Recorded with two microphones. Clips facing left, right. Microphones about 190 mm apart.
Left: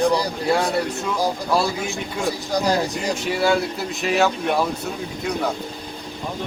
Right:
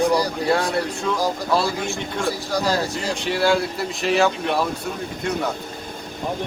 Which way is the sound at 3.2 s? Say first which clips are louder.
Right 1 dB; centre (ahead or behind).